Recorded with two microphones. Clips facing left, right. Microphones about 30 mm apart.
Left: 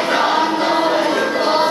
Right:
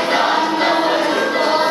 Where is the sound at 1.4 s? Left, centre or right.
Centre.